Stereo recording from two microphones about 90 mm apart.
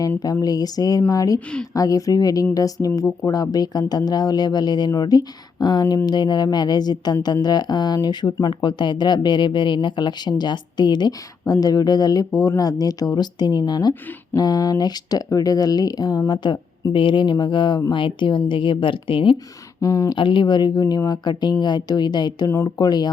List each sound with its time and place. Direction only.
0.4 s speech: 45° left (ahead or behind)
16.4 s speech: 55° left (ahead or behind)
19.8 s speech: 35° left (ahead or behind)
20.1 s speech: 65° left (ahead or behind)
22.4 s speech: 35° left (ahead or behind)
22.8 s speech: 50° left (ahead or behind)